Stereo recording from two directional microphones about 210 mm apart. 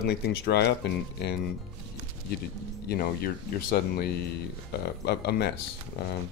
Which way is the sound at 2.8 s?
45° left (ahead or behind).